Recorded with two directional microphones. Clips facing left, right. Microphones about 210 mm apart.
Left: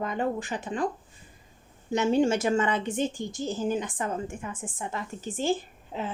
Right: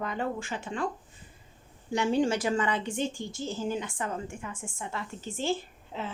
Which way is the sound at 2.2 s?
25° left (ahead or behind).